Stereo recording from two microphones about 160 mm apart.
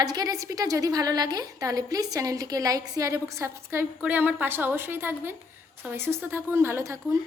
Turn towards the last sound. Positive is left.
turn(degrees=-20)  # may be behind; listen again after turning